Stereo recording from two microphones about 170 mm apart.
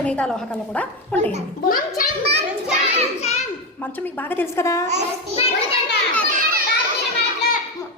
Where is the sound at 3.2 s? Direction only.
40° left (ahead or behind).